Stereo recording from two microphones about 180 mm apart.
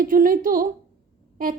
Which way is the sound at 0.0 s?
50° right (ahead or behind).